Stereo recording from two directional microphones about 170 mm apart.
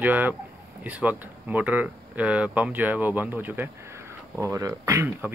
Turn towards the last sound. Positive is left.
turn(degrees=-15)  # may be behind; listen again after turning